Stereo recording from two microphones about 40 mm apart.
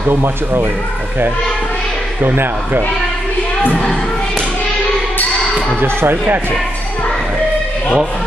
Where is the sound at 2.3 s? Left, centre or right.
Right.